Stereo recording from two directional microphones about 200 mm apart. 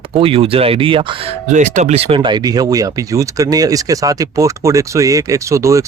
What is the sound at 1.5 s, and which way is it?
Speech, 35° right (ahead or behind).